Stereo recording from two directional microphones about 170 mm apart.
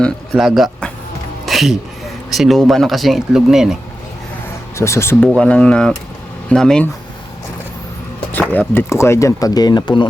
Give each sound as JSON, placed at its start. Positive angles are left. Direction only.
{"t": 0.0, "sound": "speech", "side_deg": 0}
{"t": 1.5, "sound": "a sound", "side_deg": 0}
{"t": 2.3, "sound": "speech", "side_deg": 0}
{"t": 4.8, "sound": "speech", "side_deg": 15}
{"t": 8.3, "sound": "speech", "side_deg": 10}